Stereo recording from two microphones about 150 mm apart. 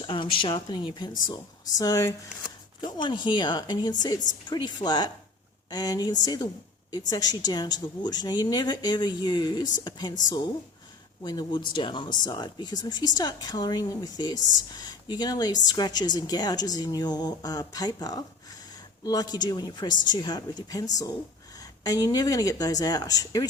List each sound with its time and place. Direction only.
0.0 s speech: 35° left (ahead or behind)